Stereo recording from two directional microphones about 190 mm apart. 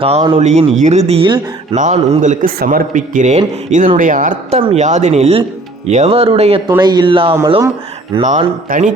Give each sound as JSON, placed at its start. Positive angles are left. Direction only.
{"t": 0.0, "sound": "speech", "side_deg": -30}
{"t": 1.8, "sound": "a man's voice", "side_deg": -40}